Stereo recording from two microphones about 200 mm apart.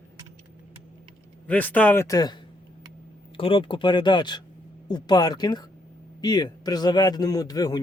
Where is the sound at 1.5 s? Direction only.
10° left (ahead or behind).